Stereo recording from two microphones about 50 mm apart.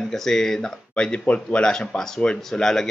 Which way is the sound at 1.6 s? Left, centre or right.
Centre.